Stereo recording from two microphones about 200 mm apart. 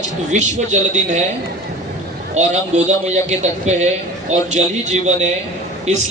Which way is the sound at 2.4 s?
35° right (ahead or behind).